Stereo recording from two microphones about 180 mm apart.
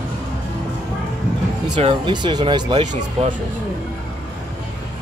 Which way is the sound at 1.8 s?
25° right (ahead or behind).